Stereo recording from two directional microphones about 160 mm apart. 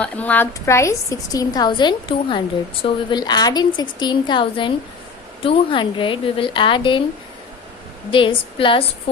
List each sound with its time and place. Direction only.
0.0 s a woman's voice: 10° left (ahead or behind); by 7.0 s 30° left (ahead or behind)
8.1 s speech: 35° left (ahead or behind)